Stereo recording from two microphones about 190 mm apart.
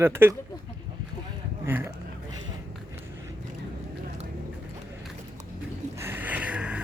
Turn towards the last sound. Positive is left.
turn(degrees=-5)  # may be behind; listen again after turning